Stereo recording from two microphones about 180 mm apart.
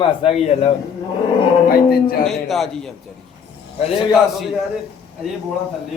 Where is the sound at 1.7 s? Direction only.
55° left (ahead or behind).